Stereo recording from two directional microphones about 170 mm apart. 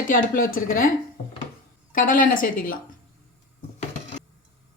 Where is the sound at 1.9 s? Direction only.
55° left (ahead or behind).